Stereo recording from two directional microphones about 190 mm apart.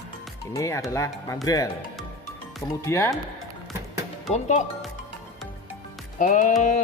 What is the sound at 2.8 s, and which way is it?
Speech, 15° left (ahead or behind).